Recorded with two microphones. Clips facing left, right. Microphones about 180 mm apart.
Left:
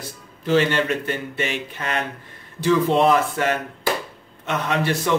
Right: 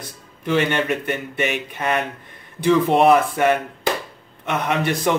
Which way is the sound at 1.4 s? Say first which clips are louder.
Right 3 dB; 15° right (ahead or behind).